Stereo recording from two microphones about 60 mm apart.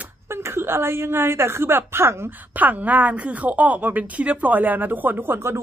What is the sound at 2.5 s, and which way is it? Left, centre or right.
Speech, right.